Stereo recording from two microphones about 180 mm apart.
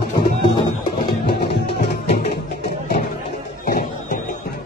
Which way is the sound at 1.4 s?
70° left (ahead or behind).